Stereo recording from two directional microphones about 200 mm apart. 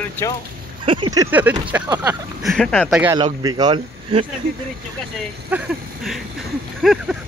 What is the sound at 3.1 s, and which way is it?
Speech, 20° right (ahead or behind).